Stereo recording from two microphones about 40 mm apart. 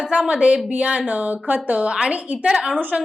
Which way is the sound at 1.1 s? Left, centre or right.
Right.